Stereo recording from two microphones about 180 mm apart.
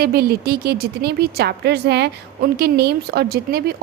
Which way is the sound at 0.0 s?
60° right (ahead or behind).